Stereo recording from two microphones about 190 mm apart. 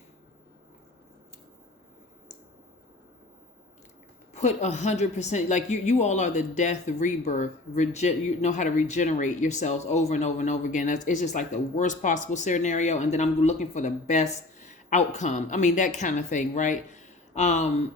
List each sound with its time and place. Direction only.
4.4 s a woman's voice: 35° left (ahead or behind)